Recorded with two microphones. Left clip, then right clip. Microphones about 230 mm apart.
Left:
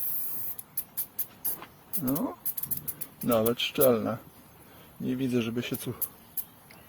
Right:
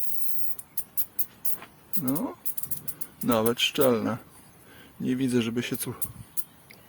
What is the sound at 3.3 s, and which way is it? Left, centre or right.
Speech, centre.